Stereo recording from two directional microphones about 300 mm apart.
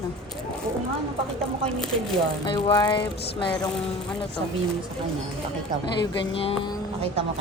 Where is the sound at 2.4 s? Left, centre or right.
Centre.